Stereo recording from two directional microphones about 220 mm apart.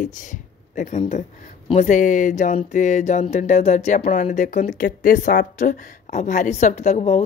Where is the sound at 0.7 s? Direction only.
30° left (ahead or behind).